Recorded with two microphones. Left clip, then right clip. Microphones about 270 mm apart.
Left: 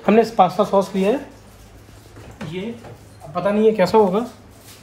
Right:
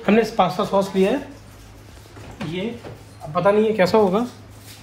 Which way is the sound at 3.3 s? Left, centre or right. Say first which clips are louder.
Even; centre.